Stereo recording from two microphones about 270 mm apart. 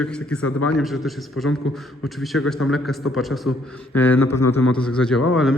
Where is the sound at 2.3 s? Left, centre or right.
Left.